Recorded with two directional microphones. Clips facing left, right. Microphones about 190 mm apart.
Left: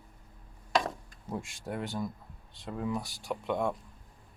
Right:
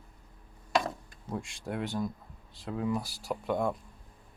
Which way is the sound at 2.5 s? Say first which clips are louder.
Right 2 dB; centre (ahead or behind).